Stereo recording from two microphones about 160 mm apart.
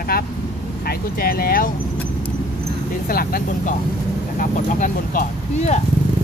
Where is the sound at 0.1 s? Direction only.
75° left (ahead or behind).